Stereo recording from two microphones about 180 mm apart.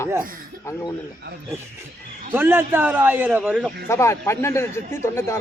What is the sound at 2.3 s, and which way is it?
A man's voice, 10° right (ahead or behind).